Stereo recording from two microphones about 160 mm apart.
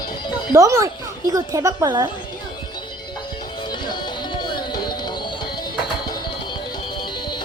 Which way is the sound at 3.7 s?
25° left (ahead or behind).